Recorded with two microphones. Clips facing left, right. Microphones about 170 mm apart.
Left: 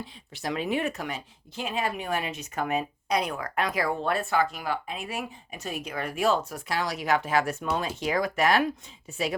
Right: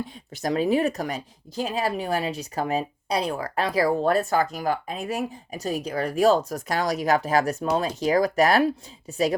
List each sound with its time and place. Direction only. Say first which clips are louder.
0.0 s speech: right 5 dB; 40° right (ahead or behind)